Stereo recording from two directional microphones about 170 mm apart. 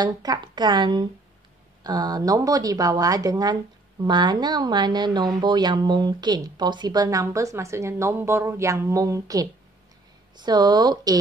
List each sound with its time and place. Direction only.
0.0 s speech: 25° right (ahead or behind)